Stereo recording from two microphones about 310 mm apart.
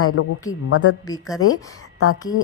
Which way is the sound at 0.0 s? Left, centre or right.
Left.